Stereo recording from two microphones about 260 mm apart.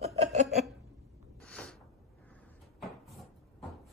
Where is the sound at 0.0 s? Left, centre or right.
Right.